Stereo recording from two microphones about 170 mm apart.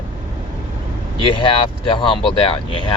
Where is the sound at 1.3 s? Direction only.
30° left (ahead or behind).